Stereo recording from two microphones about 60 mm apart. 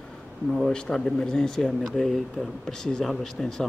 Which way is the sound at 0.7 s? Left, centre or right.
Centre.